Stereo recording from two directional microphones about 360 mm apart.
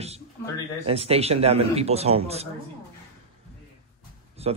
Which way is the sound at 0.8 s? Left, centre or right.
Centre.